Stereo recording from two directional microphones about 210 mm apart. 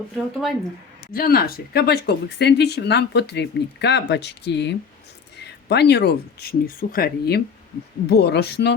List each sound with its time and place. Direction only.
1.1 s speech: 45° left (ahead or behind)